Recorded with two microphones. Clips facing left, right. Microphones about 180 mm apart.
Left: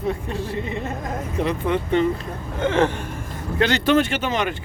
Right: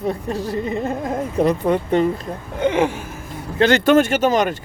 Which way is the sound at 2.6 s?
15° right (ahead or behind).